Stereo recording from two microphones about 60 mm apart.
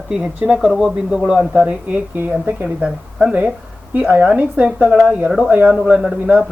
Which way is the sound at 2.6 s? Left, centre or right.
Centre.